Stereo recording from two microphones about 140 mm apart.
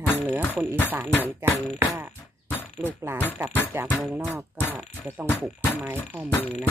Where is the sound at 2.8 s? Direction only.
15° right (ahead or behind).